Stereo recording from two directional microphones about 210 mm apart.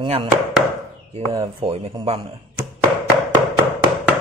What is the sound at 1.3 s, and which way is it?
Speech, 15° right (ahead or behind).